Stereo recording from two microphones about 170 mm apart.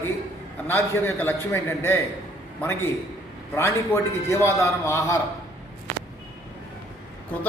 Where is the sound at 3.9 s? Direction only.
15° left (ahead or behind).